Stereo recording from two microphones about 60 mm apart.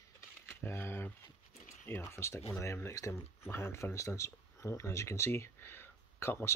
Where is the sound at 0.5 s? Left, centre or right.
Left.